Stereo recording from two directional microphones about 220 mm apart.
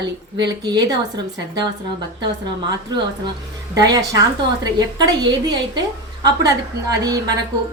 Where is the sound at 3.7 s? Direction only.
15° right (ahead or behind).